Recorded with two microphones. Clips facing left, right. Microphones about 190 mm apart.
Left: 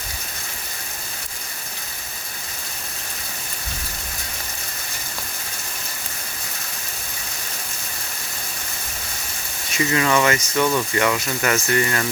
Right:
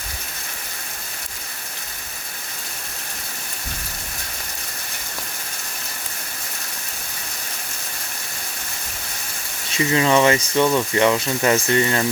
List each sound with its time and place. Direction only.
9.7 s speech: 25° right (ahead or behind)